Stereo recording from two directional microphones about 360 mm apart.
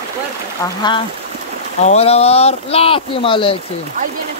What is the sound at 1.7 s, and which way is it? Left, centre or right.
Speech, centre.